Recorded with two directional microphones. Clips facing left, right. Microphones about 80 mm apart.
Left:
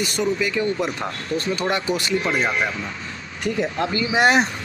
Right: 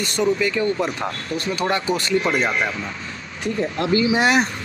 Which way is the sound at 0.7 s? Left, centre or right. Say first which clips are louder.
Right 1 dB; right.